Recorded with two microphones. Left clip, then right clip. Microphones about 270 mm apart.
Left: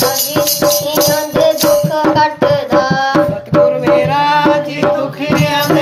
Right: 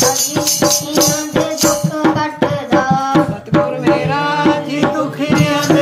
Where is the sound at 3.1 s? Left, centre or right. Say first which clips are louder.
Left 2 dB; left.